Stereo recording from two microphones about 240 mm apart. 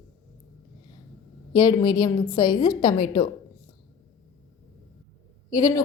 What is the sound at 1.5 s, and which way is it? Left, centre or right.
A woman's voice, centre.